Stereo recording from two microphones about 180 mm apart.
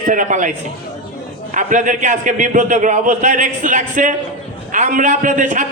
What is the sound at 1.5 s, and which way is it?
A man's voice, 45° right (ahead or behind).